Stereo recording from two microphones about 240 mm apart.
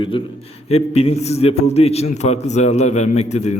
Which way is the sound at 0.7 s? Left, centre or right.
Left.